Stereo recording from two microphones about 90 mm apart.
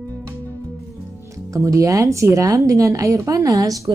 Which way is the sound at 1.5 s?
35° right (ahead or behind).